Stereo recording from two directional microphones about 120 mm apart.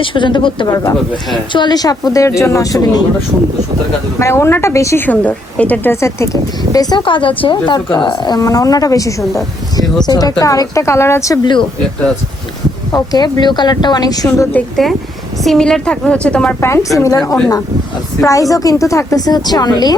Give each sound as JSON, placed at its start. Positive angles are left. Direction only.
{"t": 0.0, "sound": "speech", "side_deg": 45}
{"t": 4.2, "sound": "a woman's voice", "side_deg": 20}
{"t": 5.0, "sound": "speech", "side_deg": 10}
{"t": 6.7, "sound": "speech", "side_deg": 40}
{"t": 9.8, "sound": "speech", "side_deg": 0}
{"t": 10.1, "sound": "a woman's voice", "side_deg": 30}
{"t": 12.9, "sound": "speech", "side_deg": 35}
{"t": 14.3, "sound": "a woman's voice", "side_deg": 20}
{"t": 15.4, "sound": "speech", "side_deg": 5}
{"t": 16.6, "sound": "a woman's voice", "side_deg": 20}